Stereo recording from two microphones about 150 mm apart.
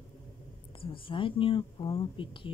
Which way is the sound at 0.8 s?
35° left (ahead or behind).